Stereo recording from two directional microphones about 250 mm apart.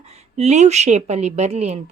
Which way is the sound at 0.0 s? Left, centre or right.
Right.